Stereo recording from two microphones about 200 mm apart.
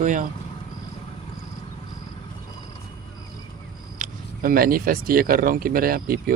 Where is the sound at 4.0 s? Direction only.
45° right (ahead or behind).